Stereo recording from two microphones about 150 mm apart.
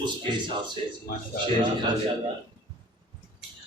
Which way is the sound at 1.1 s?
70° left (ahead or behind).